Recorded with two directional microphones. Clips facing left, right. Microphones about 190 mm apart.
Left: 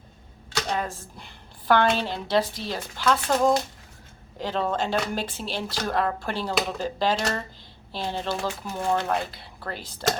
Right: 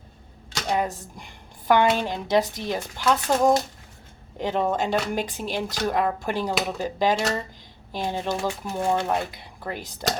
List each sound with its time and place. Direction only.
0.7 s a woman's voice: 15° right (ahead or behind)